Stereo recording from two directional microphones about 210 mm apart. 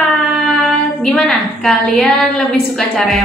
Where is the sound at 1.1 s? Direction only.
Centre (ahead or behind).